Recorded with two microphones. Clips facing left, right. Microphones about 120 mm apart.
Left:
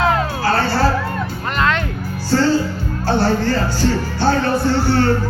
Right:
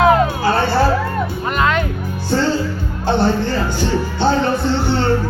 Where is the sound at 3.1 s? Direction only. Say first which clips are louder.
Even; 20° right (ahead or behind).